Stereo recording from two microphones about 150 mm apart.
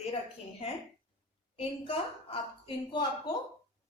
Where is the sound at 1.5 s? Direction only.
40° left (ahead or behind).